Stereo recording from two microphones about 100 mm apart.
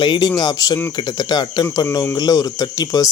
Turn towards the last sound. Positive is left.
turn(degrees=40)  # may be behind; listen again after turning